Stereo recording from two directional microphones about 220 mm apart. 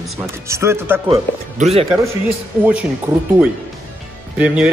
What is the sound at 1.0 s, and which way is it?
Speech, 25° right (ahead or behind).